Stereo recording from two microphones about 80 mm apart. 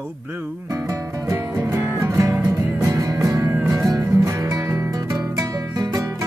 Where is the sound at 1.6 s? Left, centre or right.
Right.